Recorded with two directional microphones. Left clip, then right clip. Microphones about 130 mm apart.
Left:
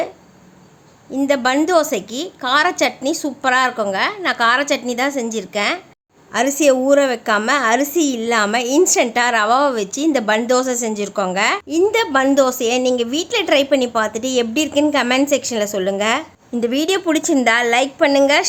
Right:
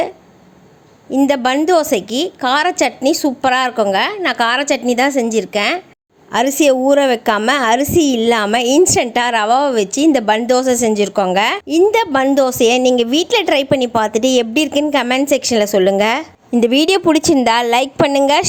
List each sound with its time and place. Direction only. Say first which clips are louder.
1.3 s a woman's voice: even; 40° right (ahead or behind)